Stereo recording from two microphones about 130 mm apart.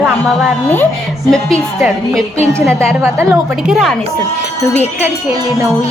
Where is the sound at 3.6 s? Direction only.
Centre (ahead or behind).